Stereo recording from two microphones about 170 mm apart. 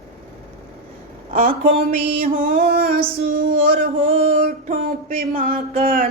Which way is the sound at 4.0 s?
55° right (ahead or behind).